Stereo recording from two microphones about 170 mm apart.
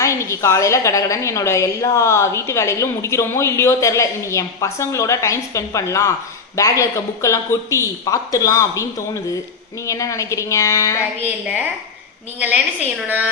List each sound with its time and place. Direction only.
0.0 s a woman's voice: 15° left (ahead or behind)
11.3 s a woman's voice: 10° right (ahead or behind)